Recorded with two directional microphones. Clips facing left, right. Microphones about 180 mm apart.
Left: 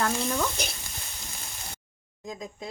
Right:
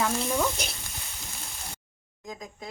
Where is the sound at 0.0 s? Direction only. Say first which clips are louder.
Right 1 dB; 5° right (ahead or behind).